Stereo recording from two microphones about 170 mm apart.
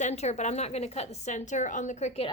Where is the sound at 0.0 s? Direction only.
40° left (ahead or behind).